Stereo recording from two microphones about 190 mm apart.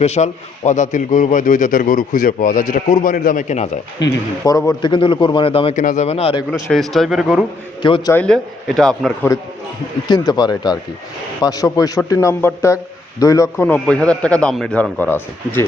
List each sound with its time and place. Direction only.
0.0 s a man's voice: 35° left (ahead or behind)
4.0 s a man's voice: 20° left (ahead or behind)
5.7 s speech: 40° left (ahead or behind)
6.5 s speech: centre (ahead or behind)
7.8 s a man's voice: 25° left (ahead or behind)
8.1 s speech: 5° left (ahead or behind)
10.1 s a man's voice: 20° left (ahead or behind)